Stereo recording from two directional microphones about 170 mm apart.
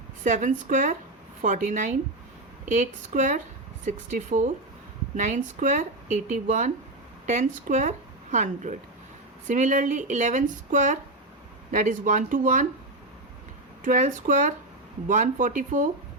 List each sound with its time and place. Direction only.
0.3 s speech: 45° right (ahead or behind)
13.8 s speech: 50° right (ahead or behind)